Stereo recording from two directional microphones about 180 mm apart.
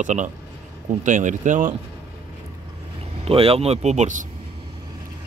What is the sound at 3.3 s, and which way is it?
Speech, 30° right (ahead or behind).